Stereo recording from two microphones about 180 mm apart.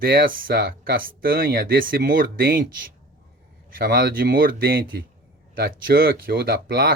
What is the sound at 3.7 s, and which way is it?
Speech, 55° right (ahead or behind).